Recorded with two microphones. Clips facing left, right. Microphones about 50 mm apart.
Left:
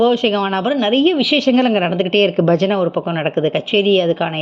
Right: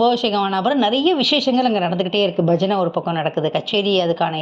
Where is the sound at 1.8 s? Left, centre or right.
Left.